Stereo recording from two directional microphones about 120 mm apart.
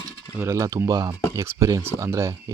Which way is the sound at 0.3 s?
25° right (ahead or behind).